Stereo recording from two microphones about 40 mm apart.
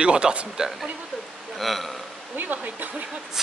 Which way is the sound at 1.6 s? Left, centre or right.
Centre.